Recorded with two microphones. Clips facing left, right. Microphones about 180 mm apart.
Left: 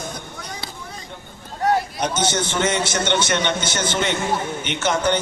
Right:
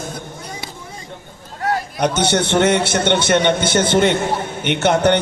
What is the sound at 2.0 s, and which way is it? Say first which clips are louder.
A man's voice: right 5 dB; 65° right (ahead or behind).